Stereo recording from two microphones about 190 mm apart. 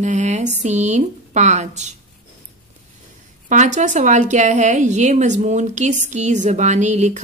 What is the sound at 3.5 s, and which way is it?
Speech, 40° right (ahead or behind).